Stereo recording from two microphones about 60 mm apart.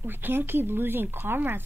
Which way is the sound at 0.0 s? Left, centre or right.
Right.